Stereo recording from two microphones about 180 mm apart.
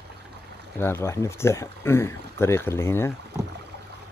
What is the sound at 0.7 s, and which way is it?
Speech, 15° left (ahead or behind).